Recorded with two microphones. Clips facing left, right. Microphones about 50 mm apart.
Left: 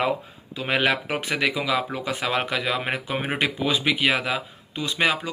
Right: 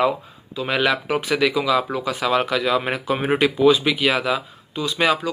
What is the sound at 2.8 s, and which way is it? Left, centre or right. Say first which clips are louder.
Speech: right 4 dB; centre.